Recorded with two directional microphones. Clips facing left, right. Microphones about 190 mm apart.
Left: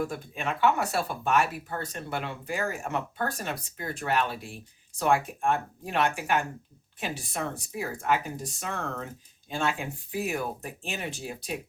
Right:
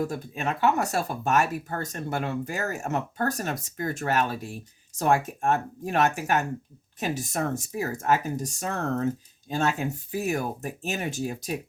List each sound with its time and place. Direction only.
0.0 s speech: 40° right (ahead or behind)